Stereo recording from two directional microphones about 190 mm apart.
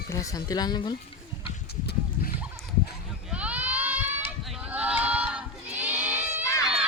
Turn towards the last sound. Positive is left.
turn(degrees=15)  # may be behind; listen again after turning